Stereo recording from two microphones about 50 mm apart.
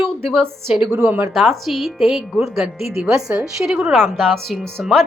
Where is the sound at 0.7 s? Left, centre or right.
Centre.